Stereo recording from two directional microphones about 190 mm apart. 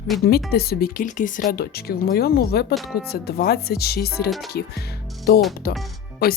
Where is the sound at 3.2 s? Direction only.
55° left (ahead or behind).